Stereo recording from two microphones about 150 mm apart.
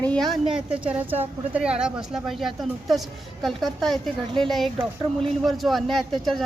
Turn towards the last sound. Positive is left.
turn(degrees=0)  # may be behind; listen again after turning